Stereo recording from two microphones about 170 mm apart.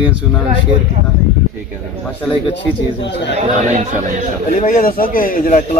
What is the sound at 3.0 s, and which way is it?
Speech, 90° left.